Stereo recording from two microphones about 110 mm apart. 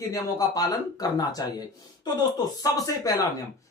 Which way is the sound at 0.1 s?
30° left (ahead or behind).